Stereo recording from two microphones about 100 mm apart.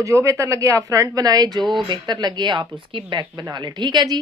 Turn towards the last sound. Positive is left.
turn(degrees=-45)  # may be behind; listen again after turning